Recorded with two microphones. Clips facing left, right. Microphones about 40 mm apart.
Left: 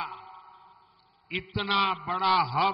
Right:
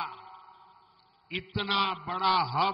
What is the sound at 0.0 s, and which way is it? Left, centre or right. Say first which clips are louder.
Sonar: left 1 dB; centre.